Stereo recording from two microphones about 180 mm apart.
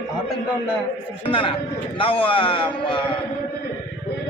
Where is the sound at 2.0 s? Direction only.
30° left (ahead or behind).